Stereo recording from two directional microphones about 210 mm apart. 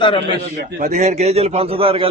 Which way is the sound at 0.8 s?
35° right (ahead or behind).